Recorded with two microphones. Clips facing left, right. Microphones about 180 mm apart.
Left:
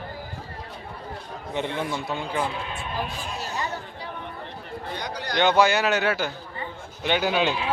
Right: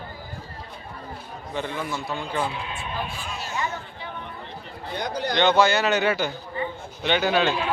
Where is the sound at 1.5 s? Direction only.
20° left (ahead or behind).